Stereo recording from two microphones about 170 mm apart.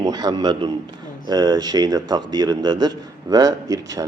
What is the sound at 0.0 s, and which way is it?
A man's voice, 25° right (ahead or behind).